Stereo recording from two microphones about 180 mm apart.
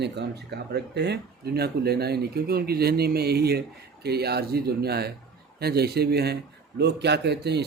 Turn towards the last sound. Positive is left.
turn(degrees=-65)  # may be behind; listen again after turning